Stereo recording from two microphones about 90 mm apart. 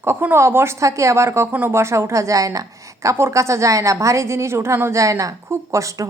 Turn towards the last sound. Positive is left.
turn(degrees=-35)  # may be behind; listen again after turning